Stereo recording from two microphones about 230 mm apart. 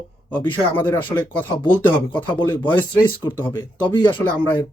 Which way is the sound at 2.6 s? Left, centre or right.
Left.